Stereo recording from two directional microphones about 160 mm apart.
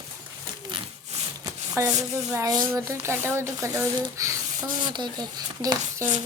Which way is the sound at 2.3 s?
20° right (ahead or behind).